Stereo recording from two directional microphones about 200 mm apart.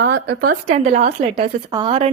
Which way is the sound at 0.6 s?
35° right (ahead or behind).